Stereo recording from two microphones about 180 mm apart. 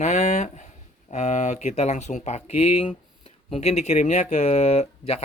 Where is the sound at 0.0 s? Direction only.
40° left (ahead or behind).